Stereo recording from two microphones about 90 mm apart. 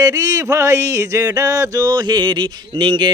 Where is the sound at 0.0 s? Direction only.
40° right (ahead or behind).